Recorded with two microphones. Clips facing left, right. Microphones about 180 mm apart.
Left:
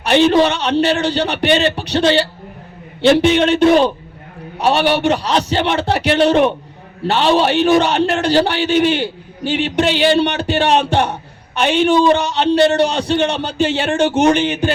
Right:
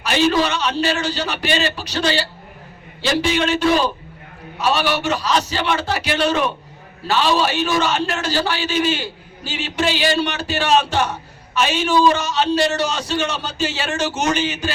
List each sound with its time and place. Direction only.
0.0 s a man's voice: 60° left (ahead or behind)